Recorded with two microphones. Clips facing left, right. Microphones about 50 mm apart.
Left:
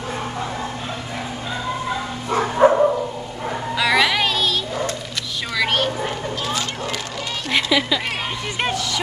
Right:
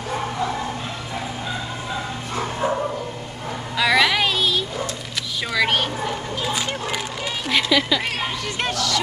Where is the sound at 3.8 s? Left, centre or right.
Centre.